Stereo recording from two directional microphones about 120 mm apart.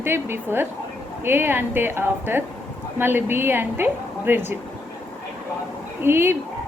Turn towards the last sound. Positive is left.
turn(degrees=-20)  # may be behind; listen again after turning